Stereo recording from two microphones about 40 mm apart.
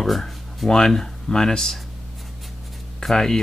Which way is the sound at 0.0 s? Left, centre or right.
Centre.